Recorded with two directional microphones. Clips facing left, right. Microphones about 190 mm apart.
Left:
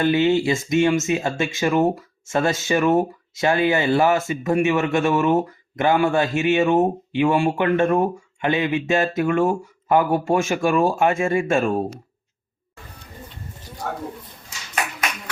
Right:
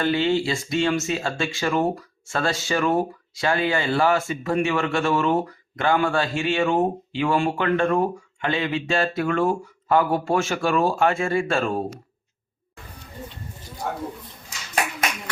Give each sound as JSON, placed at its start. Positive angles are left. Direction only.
{"t": 0.0, "sound": "speech", "side_deg": 20}